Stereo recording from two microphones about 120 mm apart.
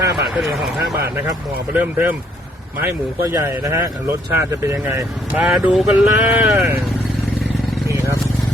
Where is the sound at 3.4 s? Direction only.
25° right (ahead or behind).